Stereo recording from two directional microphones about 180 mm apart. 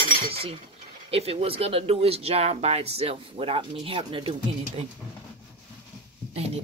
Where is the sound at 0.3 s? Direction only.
30° right (ahead or behind).